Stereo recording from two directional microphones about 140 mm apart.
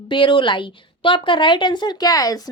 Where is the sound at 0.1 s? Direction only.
35° left (ahead or behind).